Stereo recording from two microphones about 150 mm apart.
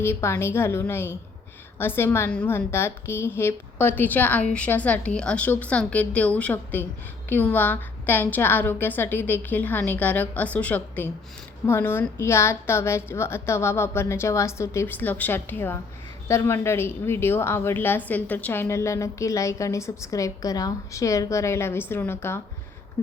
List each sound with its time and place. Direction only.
0.0 s a woman's voice: 15° left (ahead or behind)